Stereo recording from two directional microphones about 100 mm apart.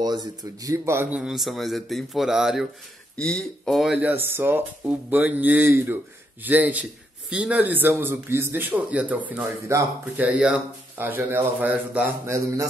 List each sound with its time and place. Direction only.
0.0 s a man's voice: 45° right (ahead or behind)
1.1 s speech: 5° right (ahead or behind)
3.2 s speech: 5° left (ahead or behind)
4.0 s a man's voice: 20° right (ahead or behind)
9.7 s speech: 30° right (ahead or behind)
10.1 s a man's voice: 15° right (ahead or behind)
12.3 s speech: 30° right (ahead or behind)